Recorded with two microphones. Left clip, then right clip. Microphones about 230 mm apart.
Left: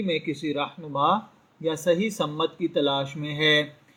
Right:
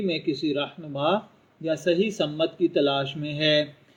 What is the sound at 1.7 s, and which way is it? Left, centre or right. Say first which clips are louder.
Speech: right 1 dB; left.